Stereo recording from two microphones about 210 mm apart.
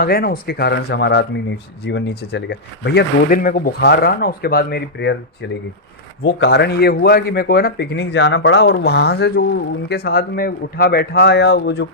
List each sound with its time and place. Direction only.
0.0 s speech: 45° left (ahead or behind)